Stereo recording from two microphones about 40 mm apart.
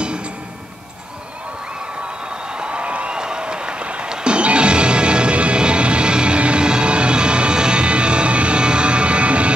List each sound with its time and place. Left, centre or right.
2.5 s applause: right
4.1 s music: right